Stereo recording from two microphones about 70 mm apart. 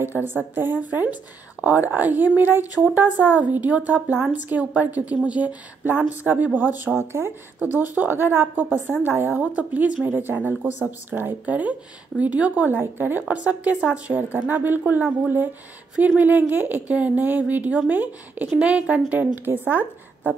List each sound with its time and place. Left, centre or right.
0.0 s speech: right
16.2 s speech: right